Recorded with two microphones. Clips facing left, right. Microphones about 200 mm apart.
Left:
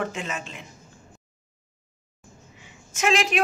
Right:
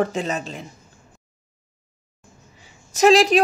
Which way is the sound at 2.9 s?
35° right (ahead or behind).